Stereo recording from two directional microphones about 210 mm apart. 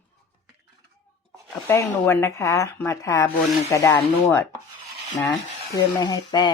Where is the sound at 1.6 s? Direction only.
10° left (ahead or behind).